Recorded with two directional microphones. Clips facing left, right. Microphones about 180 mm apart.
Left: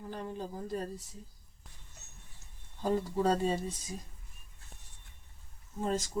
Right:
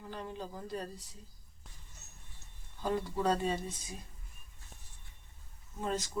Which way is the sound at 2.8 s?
40° left (ahead or behind).